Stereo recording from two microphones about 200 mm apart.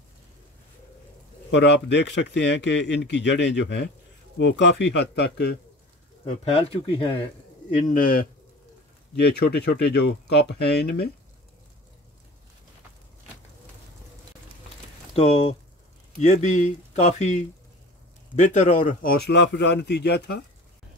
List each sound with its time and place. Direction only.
1.5 s speech: 60° left (ahead or behind)
6.2 s speech: 30° left (ahead or behind)
7.9 s speech: 45° left (ahead or behind)
15.1 s speech: 30° left (ahead or behind); by 20.4 s 55° left (ahead or behind)